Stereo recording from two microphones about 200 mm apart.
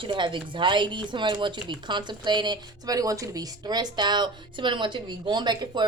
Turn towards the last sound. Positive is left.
turn(degrees=-20)  # may be behind; listen again after turning